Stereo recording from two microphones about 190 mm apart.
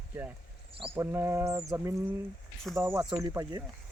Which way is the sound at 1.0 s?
15° right (ahead or behind).